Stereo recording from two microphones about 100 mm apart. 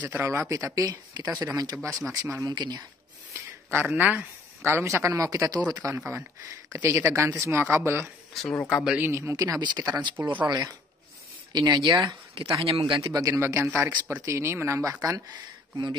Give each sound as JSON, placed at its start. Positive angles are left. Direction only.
{"t": 0.0, "sound": "speech", "side_deg": -20}
{"t": 2.5, "sound": "speech", "side_deg": -45}
{"t": 3.8, "sound": "speech", "side_deg": -15}
{"t": 4.6, "sound": "speech", "side_deg": -25}
{"t": 5.9, "sound": "speech", "side_deg": -25}
{"t": 8.3, "sound": "a man's voice", "side_deg": 5}
{"t": 9.1, "sound": "speech", "side_deg": -35}
{"t": 12.6, "sound": "speech", "side_deg": -65}
{"t": 12.9, "sound": "speech", "side_deg": -35}
{"t": 15.0, "sound": "speech", "side_deg": -45}